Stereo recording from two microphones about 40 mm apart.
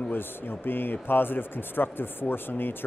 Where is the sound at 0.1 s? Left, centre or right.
Left.